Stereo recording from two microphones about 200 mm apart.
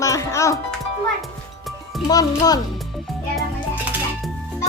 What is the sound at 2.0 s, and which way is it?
Speech, 20° left (ahead or behind).